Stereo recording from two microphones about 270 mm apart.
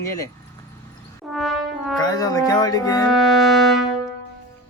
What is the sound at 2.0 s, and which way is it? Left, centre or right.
Speech, centre.